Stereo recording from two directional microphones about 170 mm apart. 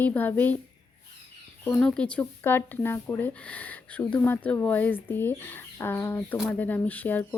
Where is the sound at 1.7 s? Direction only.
5° left (ahead or behind).